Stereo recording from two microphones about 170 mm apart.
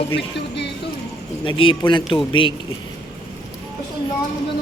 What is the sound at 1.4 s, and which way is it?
Speech, 30° left (ahead or behind).